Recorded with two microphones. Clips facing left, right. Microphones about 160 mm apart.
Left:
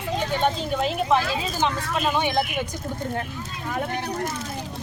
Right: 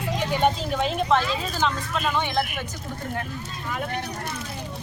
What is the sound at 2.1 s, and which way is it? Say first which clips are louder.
Speech: left 2 dB; 15° left (ahead or behind).